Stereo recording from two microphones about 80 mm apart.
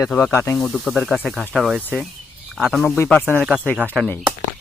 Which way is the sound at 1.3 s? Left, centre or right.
Centre.